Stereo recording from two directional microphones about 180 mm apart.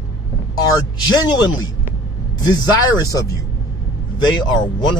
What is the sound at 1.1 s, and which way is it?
Speech, 25° left (ahead or behind).